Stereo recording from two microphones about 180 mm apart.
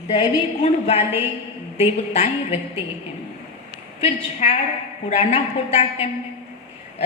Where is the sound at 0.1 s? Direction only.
30° left (ahead or behind).